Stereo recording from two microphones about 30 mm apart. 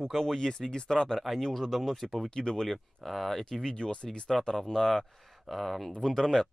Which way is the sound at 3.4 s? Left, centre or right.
Left.